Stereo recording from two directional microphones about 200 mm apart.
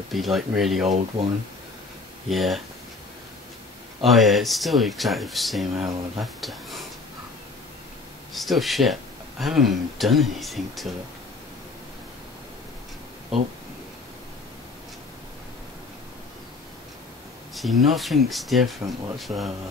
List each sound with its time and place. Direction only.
0.1 s speech: centre (ahead or behind)
0.8 s speech: 35° right (ahead or behind)
2.2 s speech: centre (ahead or behind)
4.0 s speech: centre (ahead or behind)
8.3 s speech: centre (ahead or behind)
17.6 s speech: centre (ahead or behind)